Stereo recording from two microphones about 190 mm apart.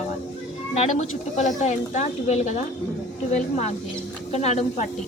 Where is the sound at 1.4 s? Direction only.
40° left (ahead or behind).